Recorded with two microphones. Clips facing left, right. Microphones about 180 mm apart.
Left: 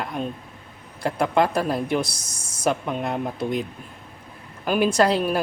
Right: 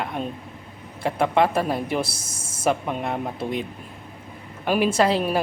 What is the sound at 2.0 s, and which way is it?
Speech, 25° right (ahead or behind).